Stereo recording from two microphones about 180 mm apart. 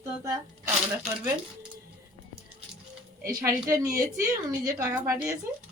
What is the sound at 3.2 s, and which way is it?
A woman's voice, 15° right (ahead or behind).